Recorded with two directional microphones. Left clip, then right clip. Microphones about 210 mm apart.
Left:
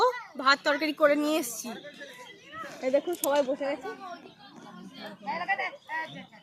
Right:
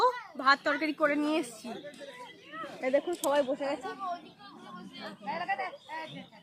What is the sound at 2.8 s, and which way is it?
Speech, 40° left (ahead or behind).